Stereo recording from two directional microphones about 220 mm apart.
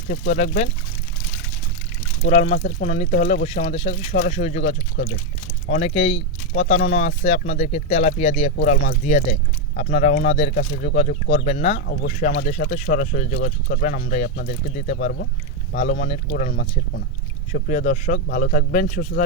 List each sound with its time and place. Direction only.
0.1 s speech: 35° left (ahead or behind)
2.2 s speech: 30° left (ahead or behind)
8.7 s speech: 45° left (ahead or behind)
11.4 s speech: 30° left (ahead or behind)
12.0 s speech: 40° left (ahead or behind)